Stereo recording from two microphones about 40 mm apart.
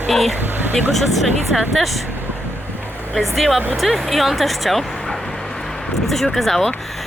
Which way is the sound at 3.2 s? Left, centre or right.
Centre.